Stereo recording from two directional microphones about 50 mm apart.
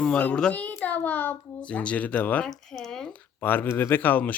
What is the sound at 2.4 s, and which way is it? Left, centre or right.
Speech, centre.